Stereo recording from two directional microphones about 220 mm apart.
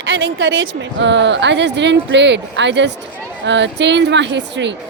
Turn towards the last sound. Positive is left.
turn(degrees=-55)  # may be behind; listen again after turning